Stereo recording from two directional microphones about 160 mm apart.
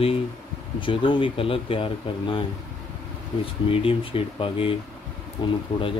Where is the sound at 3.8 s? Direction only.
35° left (ahead or behind).